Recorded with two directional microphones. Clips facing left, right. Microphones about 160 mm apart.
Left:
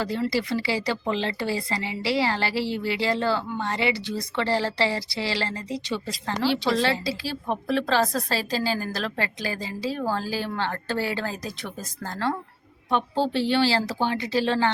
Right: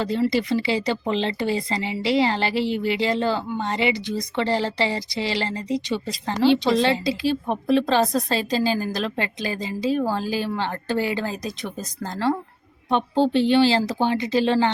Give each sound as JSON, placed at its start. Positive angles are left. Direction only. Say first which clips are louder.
{"t": 0.0, "sound": "speech", "louder": "right 4 dB", "side_deg": -20}